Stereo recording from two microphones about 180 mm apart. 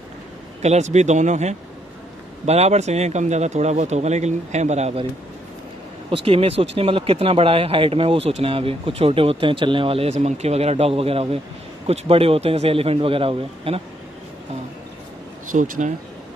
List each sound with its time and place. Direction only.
0.6 s speech: 40° right (ahead or behind)
6.2 s speech: 30° right (ahead or behind)
15.5 s speech: 45° right (ahead or behind)